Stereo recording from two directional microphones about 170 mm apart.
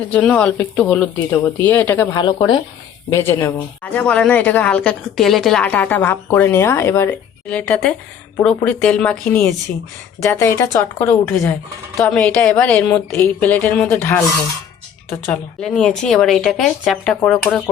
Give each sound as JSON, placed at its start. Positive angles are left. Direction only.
{"t": 0.1, "sound": "speech", "side_deg": 10}
{"t": 2.1, "sound": "speech", "side_deg": 25}
{"t": 3.1, "sound": "speech", "side_deg": 15}
{"t": 15.3, "sound": "speech", "side_deg": 5}